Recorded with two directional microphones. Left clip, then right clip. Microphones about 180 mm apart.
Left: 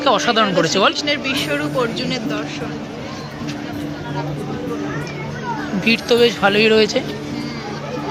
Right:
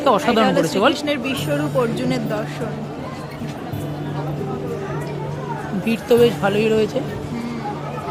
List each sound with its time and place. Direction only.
0.0 s speech: 5° right (ahead or behind)
1.0 s speech: 45° right (ahead or behind)
5.8 s speech: centre (ahead or behind)